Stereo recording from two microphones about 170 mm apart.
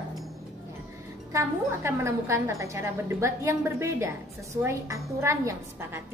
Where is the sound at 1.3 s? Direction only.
15° right (ahead or behind).